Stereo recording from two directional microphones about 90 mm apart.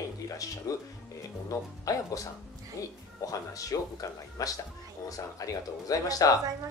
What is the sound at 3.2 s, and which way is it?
Speech, 40° left (ahead or behind).